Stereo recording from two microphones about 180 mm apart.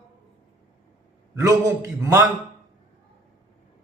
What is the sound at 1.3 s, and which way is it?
Speech, 20° right (ahead or behind).